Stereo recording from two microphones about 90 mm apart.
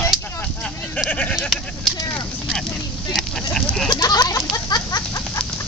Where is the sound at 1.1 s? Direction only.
15° left (ahead or behind).